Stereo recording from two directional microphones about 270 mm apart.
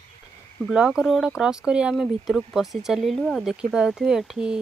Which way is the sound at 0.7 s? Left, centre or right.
Centre.